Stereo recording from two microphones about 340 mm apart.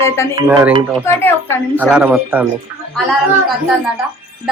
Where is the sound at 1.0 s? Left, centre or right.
Centre.